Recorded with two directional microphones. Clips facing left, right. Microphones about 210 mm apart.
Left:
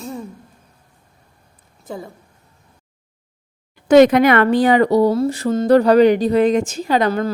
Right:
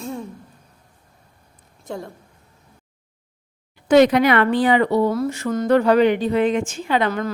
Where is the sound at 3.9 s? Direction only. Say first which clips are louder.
Left 3 dB; 45° left (ahead or behind).